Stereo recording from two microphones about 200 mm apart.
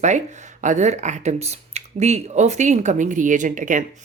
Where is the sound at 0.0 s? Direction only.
35° right (ahead or behind).